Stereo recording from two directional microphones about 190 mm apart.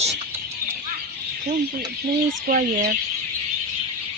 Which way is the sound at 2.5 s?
50° right (ahead or behind).